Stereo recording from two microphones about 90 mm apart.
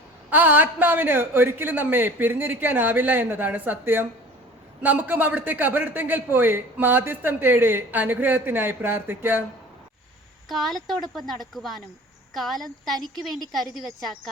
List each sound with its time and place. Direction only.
0.3 s a man's voice: 20° right (ahead or behind)
10.5 s a woman's voice: centre (ahead or behind)